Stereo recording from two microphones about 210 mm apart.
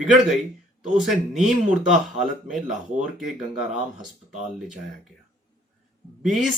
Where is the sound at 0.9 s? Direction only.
Centre (ahead or behind).